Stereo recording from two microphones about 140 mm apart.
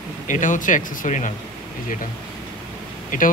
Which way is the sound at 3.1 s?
80° left.